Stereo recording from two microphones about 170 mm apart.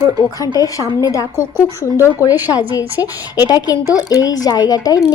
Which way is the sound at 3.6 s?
20° left (ahead or behind).